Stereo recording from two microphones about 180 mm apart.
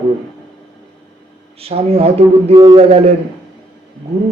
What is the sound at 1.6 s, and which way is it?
A man's voice, 35° right (ahead or behind).